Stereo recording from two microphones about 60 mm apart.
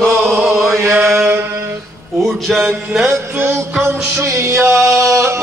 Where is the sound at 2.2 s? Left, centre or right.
Centre.